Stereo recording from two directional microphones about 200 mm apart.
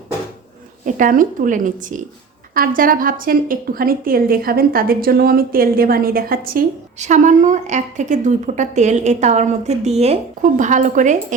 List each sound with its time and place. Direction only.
0.9 s a woman's voice: 40° right (ahead or behind)